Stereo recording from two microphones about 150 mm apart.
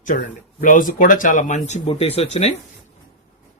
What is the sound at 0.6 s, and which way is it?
Speech, 60° left (ahead or behind).